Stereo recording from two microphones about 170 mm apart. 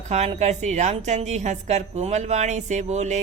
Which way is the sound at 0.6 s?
40° right (ahead or behind).